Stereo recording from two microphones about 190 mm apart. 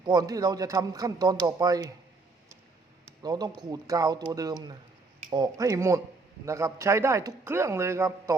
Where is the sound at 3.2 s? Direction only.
20° right (ahead or behind).